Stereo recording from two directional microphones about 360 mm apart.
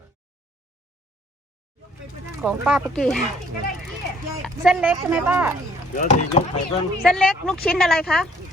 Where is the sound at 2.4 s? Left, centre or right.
Centre.